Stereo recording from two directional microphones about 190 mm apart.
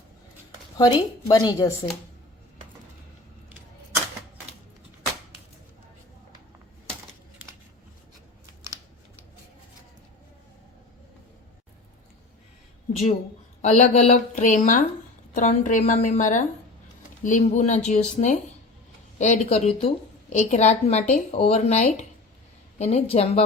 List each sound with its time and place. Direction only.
0.8 s a woman's voice: 20° left (ahead or behind)
13.6 s a woman's voice: 35° left (ahead or behind)